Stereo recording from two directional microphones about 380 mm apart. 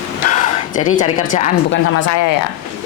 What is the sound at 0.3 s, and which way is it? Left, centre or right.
A woman's voice, centre.